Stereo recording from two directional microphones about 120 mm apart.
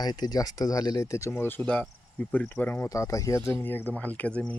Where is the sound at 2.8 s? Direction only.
25° left (ahead or behind).